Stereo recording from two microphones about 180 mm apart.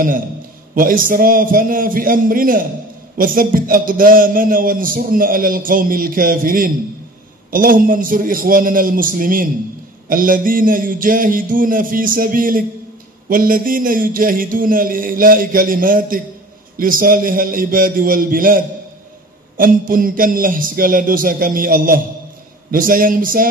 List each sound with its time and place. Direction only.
0.7 s a man's voice: 50° right (ahead or behind)